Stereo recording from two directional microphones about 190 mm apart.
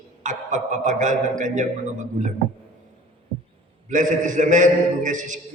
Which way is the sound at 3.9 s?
40° right (ahead or behind).